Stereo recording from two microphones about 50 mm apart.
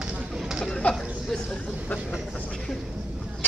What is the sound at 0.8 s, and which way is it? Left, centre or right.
Speech, left.